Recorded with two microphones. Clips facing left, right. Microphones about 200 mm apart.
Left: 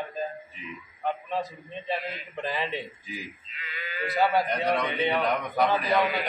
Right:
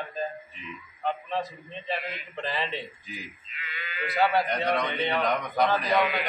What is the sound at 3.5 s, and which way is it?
Livestock, 35° left (ahead or behind).